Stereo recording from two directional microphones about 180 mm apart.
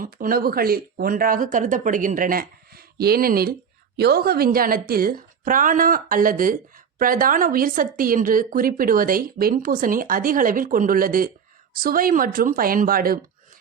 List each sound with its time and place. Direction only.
0.0 s a woman's voice: 50° right (ahead or behind)